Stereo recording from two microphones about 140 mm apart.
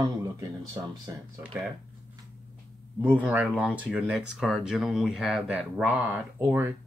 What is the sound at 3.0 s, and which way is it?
Speech, 15° right (ahead or behind).